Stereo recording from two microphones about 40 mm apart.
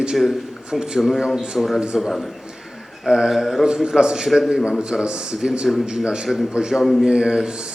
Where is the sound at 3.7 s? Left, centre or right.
Right.